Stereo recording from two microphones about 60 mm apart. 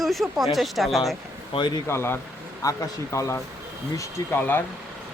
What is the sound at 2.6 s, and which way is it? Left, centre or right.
Speech, left.